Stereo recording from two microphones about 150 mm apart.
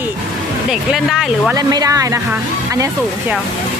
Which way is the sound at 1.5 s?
25° right (ahead or behind).